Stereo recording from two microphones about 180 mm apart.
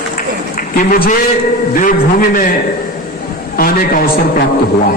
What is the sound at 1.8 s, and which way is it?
Speech, 50° left (ahead or behind).